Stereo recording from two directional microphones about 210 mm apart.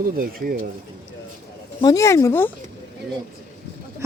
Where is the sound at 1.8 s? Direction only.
15° left (ahead or behind).